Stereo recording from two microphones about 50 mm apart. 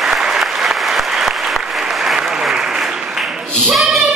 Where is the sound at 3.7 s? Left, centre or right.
Centre.